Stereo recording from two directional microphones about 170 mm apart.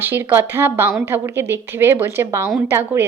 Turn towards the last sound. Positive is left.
turn(degrees=-10)  # may be behind; listen again after turning